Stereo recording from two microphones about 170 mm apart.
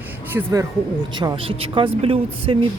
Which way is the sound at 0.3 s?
15° right (ahead or behind).